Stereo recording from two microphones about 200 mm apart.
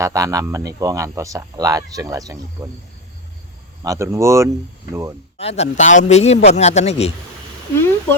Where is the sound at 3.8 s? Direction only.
15° right (ahead or behind).